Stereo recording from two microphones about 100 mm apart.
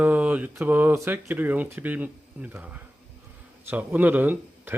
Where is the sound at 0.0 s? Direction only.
15° right (ahead or behind).